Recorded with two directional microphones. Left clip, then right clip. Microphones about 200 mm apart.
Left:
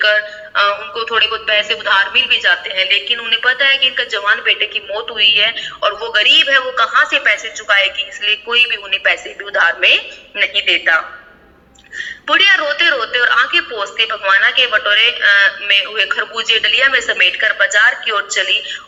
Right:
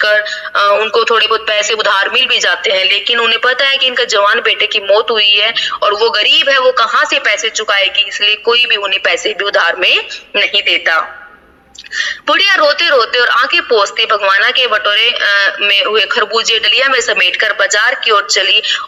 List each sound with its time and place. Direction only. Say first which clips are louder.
0.0 s a woman's voice: right 2 dB; 60° right (ahead or behind)